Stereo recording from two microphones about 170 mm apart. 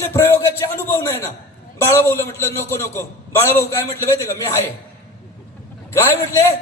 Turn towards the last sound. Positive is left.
turn(degrees=15)  # may be behind; listen again after turning